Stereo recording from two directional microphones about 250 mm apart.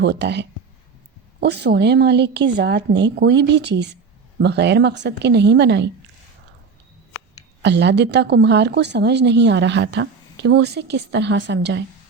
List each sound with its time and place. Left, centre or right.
0.0 s speech: right
7.6 s speech: right